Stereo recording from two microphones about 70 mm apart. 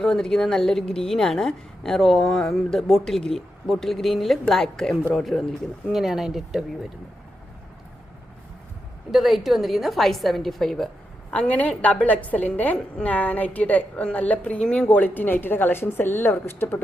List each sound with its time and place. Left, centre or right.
0.0 s a woman's voice: centre
9.1 s a woman's voice: centre
11.3 s a woman's voice: left